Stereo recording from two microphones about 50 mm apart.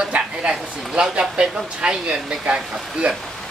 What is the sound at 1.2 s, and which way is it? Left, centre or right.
Speech, centre.